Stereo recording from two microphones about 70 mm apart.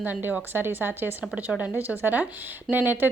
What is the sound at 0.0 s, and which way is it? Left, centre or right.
A woman's voice, right.